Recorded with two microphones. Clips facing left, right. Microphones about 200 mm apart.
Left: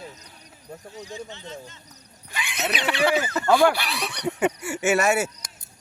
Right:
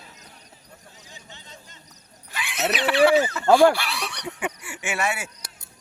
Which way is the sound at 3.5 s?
30° right (ahead or behind).